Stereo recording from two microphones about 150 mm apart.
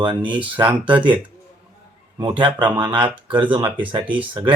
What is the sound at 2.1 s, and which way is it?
Speech, 30° right (ahead or behind).